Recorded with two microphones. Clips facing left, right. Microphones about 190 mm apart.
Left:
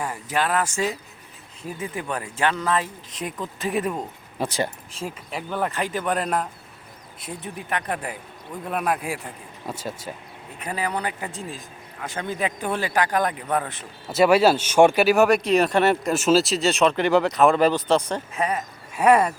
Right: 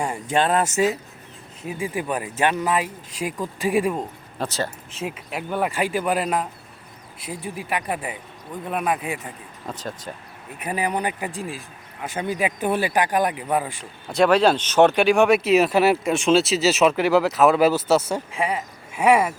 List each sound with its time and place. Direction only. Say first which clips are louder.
0.0 s speech: right 4 dB; 25° right (ahead or behind); by 4.0 s 10° right (ahead or behind)
4.4 s speech: left 1 dB; 15° left (ahead or behind)
5.0 s speech: right 2 dB; 5° right (ahead or behind)
10.6 s speech: right 3 dB; 15° right (ahead or behind)
14.1 s speech: even; 5° left (ahead or behind)